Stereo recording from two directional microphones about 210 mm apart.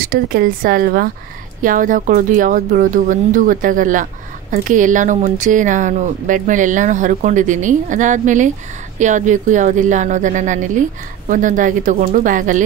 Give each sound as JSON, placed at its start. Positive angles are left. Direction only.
{"t": 0.0, "sound": "a woman's voice", "side_deg": -45}